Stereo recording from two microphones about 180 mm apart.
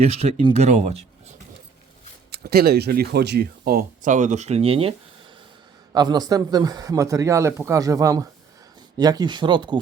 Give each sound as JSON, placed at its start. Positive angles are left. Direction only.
{"t": 0.0, "sound": "speech", "side_deg": -35}
{"t": 2.3, "sound": "speech", "side_deg": -60}
{"t": 3.6, "sound": "speech", "side_deg": -50}
{"t": 5.9, "sound": "a man's voice", "side_deg": -20}